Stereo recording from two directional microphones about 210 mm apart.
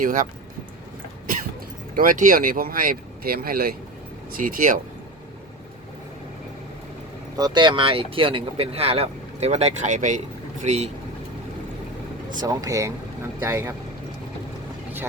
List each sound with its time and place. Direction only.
0.0 s speech: 40° right (ahead or behind)
2.0 s speech: 40° right (ahead or behind)
7.3 s speech: 20° right (ahead or behind)
12.3 s speech: 20° right (ahead or behind)